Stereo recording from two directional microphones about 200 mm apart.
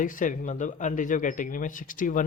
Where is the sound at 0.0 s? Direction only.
40° left (ahead or behind).